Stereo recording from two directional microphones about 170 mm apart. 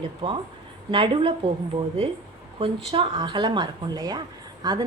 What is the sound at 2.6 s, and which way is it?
A woman's voice, 30° right (ahead or behind).